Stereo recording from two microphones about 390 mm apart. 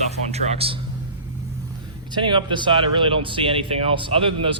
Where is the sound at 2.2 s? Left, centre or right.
Centre.